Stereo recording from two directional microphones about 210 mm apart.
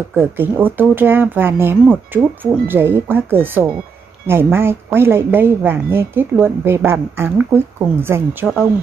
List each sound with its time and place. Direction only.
0.1 s speech: 10° right (ahead or behind)